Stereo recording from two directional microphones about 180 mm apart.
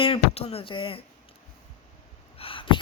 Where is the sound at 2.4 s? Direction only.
30° left (ahead or behind).